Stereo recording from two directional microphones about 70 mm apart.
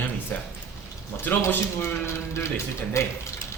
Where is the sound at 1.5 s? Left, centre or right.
Left.